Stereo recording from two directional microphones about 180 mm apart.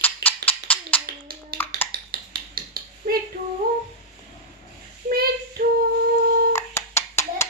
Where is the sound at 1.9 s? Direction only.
55° right (ahead or behind).